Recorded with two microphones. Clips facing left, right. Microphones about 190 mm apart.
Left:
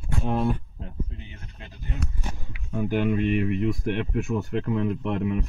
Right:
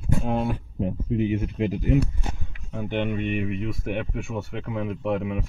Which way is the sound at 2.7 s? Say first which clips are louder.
Left 3 dB; 5° left (ahead or behind).